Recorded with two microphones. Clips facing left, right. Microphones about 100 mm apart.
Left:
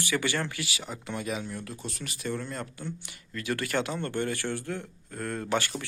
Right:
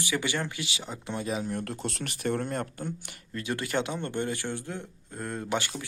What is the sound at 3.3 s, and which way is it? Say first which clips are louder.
Speech: even; 20° right (ahead or behind).